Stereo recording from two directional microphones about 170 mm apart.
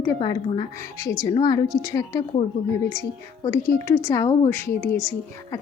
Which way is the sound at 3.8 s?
15° left (ahead or behind).